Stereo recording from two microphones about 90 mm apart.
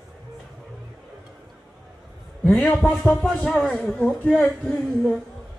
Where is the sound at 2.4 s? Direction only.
15° left (ahead or behind).